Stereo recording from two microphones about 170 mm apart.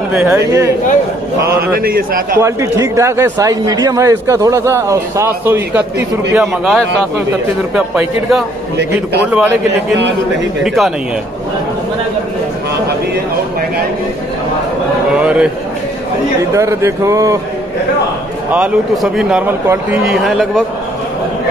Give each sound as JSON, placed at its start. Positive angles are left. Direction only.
{"t": 0.1, "sound": "a man's voice", "side_deg": -15}
{"t": 1.8, "sound": "a man's voice", "side_deg": -60}
{"t": 2.3, "sound": "a man's voice", "side_deg": -15}
{"t": 6.3, "sound": "speech", "side_deg": 0}
{"t": 8.7, "sound": "a man's voice", "side_deg": -80}
{"t": 9.2, "sound": "a man's voice", "side_deg": -10}
{"t": 9.7, "sound": "a man's voice", "side_deg": -90}
{"t": 10.6, "sound": "speech", "side_deg": 0}
{"t": 15.1, "sound": "a man's voice", "side_deg": -5}
{"t": 16.5, "sound": "speech", "side_deg": -15}
{"t": 18.5, "sound": "a man's voice", "side_deg": -5}